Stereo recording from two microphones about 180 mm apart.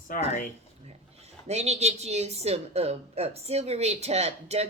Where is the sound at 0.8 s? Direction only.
35° right (ahead or behind).